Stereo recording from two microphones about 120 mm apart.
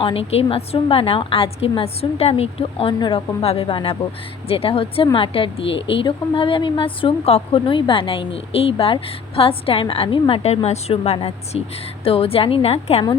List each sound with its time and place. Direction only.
0.0 s a woman's voice: 55° left (ahead or behind)